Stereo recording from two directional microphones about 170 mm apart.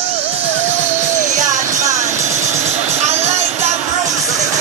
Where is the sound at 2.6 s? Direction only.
40° right (ahead or behind).